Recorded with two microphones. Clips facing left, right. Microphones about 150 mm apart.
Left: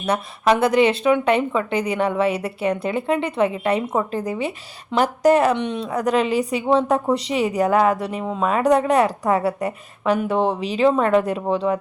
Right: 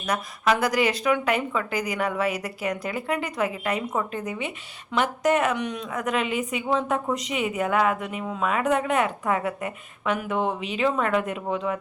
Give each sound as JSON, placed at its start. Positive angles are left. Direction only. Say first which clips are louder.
{"t": 0.0, "sound": "speech", "louder": "left 5 dB", "side_deg": 30}